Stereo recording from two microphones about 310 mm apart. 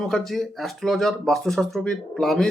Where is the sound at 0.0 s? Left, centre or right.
Centre.